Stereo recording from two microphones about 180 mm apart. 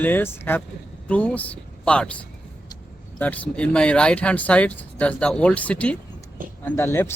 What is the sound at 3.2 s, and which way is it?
Speech, 10° left (ahead or behind).